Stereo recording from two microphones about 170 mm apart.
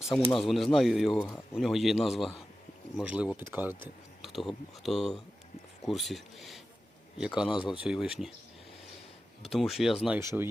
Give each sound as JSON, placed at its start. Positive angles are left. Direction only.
{"t": 0.3, "sound": "speech", "side_deg": 0}
{"t": 4.2, "sound": "speech", "side_deg": 0}
{"t": 7.5, "sound": "speech", "side_deg": 30}
{"t": 7.8, "sound": "speech", "side_deg": -5}
{"t": 9.5, "sound": "speech", "side_deg": 0}
{"t": 10.2, "sound": "speech", "side_deg": -15}